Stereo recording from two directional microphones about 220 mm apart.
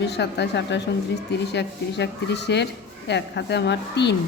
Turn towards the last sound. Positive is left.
turn(degrees=50)  # may be behind; listen again after turning